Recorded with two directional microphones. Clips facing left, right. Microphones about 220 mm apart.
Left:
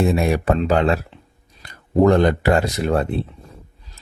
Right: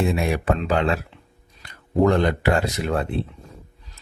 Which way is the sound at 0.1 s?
40° left (ahead or behind).